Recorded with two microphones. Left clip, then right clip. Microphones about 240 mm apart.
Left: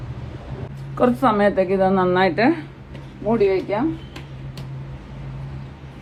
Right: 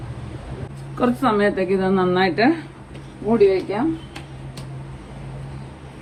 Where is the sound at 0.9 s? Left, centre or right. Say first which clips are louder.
Left 2 dB; left.